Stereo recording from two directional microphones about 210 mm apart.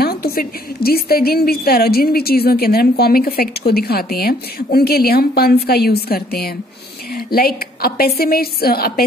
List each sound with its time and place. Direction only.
0.0 s a woman's voice: 45° left (ahead or behind)